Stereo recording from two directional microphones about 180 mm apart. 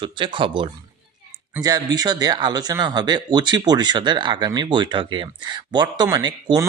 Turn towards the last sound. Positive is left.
turn(degrees=-25)  # may be behind; listen again after turning